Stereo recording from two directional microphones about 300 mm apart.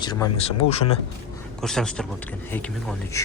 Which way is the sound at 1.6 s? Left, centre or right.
Centre.